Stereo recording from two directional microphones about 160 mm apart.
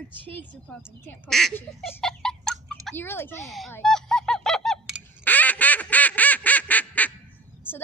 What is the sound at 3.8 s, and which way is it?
Honk, 5° left (ahead or behind).